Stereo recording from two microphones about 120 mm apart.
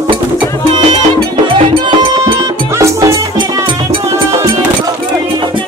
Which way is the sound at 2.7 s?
25° right (ahead or behind).